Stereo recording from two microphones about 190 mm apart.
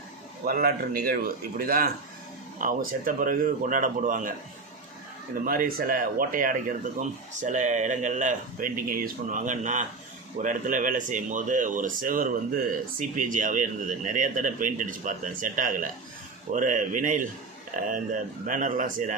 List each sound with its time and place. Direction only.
0.4 s speech: 50° right (ahead or behind)